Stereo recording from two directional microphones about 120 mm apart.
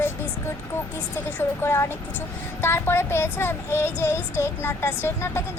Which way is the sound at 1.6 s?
20° left (ahead or behind).